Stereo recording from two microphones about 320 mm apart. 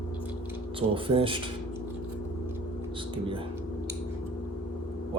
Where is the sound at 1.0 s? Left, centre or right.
Centre.